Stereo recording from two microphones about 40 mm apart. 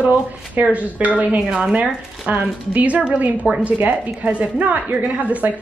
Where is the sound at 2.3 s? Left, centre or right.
Right.